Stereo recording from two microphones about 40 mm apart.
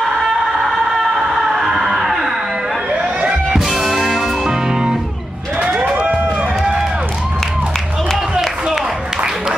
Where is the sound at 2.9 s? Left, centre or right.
Right.